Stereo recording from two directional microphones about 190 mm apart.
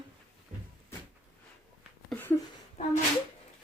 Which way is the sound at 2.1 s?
10° left (ahead or behind).